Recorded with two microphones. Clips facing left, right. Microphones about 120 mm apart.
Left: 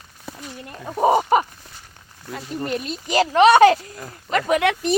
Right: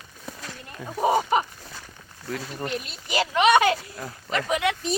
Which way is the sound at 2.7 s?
40° left (ahead or behind).